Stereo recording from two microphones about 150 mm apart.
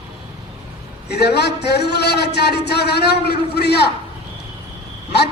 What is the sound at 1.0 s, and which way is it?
A man's voice, 90° left.